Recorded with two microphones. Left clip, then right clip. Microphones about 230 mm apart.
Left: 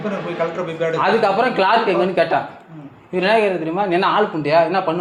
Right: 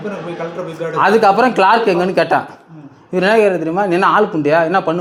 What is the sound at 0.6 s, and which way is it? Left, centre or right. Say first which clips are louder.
Speech: left 2 dB; centre.